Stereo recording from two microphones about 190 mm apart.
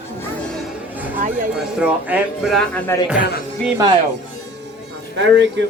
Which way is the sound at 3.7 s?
20° right (ahead or behind).